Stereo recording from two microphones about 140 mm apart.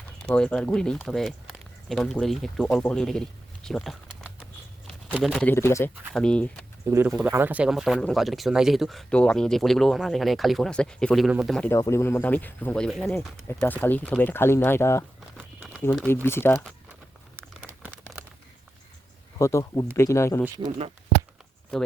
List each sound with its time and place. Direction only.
0.3 s speech: 5° left (ahead or behind)
4.9 s a sound: centre (ahead or behind)
5.5 s speech: 20° left (ahead or behind)
6.1 s speech: 5° left (ahead or behind)
6.9 s speech: 20° right (ahead or behind)
11.7 s speech: 20° left (ahead or behind)
16.2 s speech: 15° left (ahead or behind)
19.4 s speech: 20° left (ahead or behind)